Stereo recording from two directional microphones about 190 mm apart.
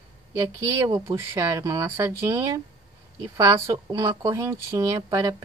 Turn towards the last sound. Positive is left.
turn(degrees=-20)  # may be behind; listen again after turning